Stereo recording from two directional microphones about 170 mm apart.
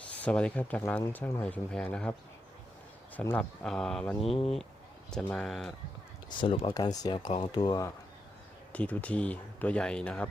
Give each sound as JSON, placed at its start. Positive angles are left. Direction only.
{"t": 0.2, "sound": "speech", "side_deg": 5}
{"t": 3.3, "sound": "speech", "side_deg": 5}
{"t": 4.3, "sound": "speech", "side_deg": 35}
{"t": 5.1, "sound": "speech", "side_deg": 0}
{"t": 6.4, "sound": "speech", "side_deg": 35}
{"t": 6.7, "sound": "speech", "side_deg": 20}
{"t": 8.7, "sound": "speech", "side_deg": 10}